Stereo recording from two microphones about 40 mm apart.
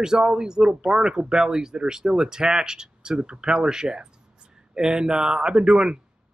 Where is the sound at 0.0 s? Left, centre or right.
Centre.